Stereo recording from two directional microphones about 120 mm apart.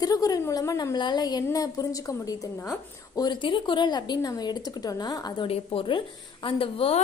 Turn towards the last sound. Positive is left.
turn(degrees=50)  # may be behind; listen again after turning